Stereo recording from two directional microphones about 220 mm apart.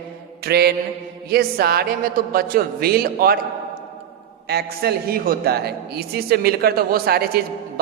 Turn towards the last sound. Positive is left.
turn(degrees=-45)  # may be behind; listen again after turning